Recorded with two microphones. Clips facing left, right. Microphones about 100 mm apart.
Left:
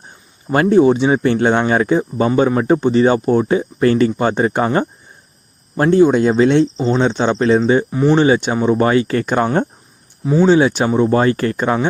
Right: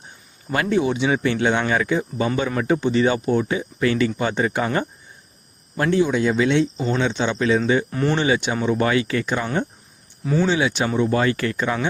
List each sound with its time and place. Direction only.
0.5 s speech: 40° left (ahead or behind)
6.8 s speech: 25° left (ahead or behind)
7.1 s speech: 40° left (ahead or behind)
7.9 s speech: 15° left (ahead or behind)
8.1 s speech: 35° left (ahead or behind)